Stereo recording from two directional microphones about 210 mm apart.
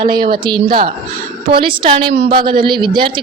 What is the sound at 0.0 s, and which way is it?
A woman's voice, 20° right (ahead or behind).